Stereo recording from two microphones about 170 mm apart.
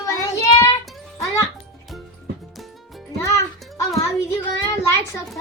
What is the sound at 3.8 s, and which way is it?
Child singing, 20° left (ahead or behind).